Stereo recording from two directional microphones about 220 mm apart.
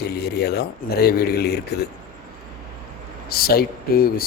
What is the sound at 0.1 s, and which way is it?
Speech, 50° left (ahead or behind).